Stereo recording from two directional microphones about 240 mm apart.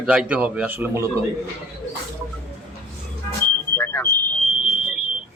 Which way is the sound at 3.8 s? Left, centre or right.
Centre.